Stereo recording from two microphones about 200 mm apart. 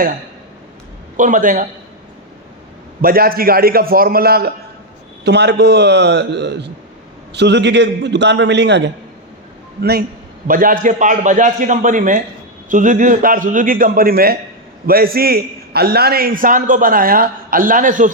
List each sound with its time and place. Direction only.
1.1 s a man's voice: 40° right (ahead or behind)
3.0 s a man's voice: 45° right (ahead or behind)
10.4 s a man's voice: 45° right (ahead or behind)